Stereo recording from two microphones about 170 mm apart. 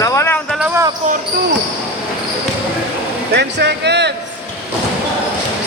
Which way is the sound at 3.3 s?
80° right.